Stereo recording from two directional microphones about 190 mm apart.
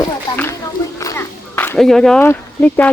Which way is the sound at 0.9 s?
15° left (ahead or behind).